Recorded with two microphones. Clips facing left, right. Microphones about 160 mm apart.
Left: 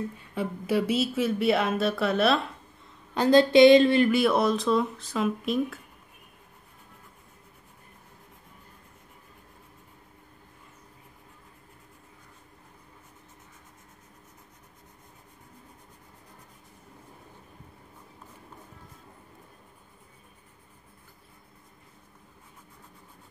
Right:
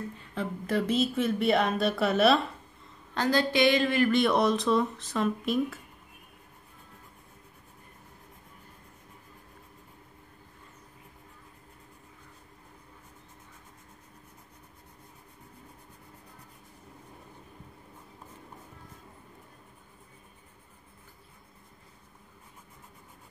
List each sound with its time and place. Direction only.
0.3 s speech: 10° left (ahead or behind)
3.2 s a sound: 20° left (ahead or behind)
4.1 s speech: 5° left (ahead or behind)